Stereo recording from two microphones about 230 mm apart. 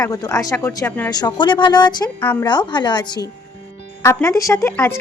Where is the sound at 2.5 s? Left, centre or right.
Centre.